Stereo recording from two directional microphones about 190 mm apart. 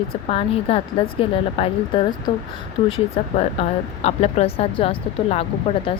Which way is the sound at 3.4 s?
35° left (ahead or behind).